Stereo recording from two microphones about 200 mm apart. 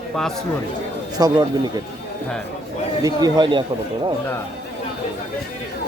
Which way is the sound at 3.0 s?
20° right (ahead or behind).